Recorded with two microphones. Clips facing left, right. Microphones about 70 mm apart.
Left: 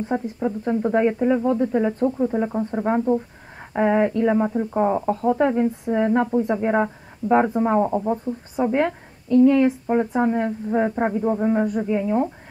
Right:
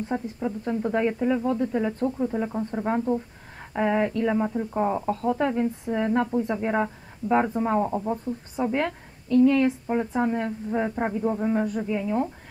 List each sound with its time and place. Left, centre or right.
0.1 s speech: centre